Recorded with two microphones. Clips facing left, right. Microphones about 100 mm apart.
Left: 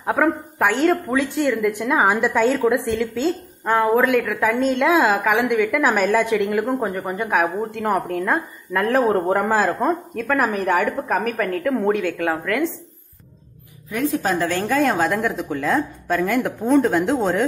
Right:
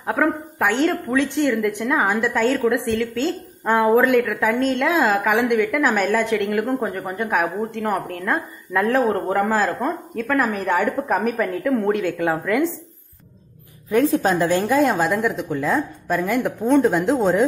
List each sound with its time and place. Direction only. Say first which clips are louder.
0.0 s a woman's voice: left 1 dB; 5° left (ahead or behind)
3.6 s a woman's voice: right 1 dB; 5° right (ahead or behind)
5.7 s a woman's voice: left 1 dB; 10° left (ahead or behind)
9.0 s a woman's voice: left 1 dB; 10° left (ahead or behind); by 12.6 s 5° right (ahead or behind)
13.8 s a woman's voice: right 4 dB; 30° right (ahead or behind)
14.4 s a woman's voice: right 3 dB; 20° right (ahead or behind)
14.8 s a woman's voice: right 1 dB; centre (ahead or behind)